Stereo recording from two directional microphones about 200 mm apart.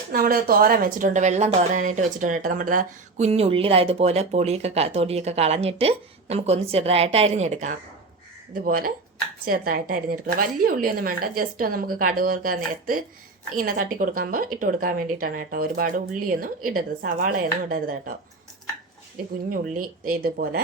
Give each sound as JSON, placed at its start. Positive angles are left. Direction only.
{"t": 0.1, "sound": "a woman's voice", "side_deg": -50}
{"t": 19.5, "sound": "a woman's voice", "side_deg": -45}